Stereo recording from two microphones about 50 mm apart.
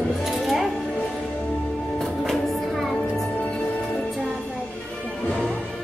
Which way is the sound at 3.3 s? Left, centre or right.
Left.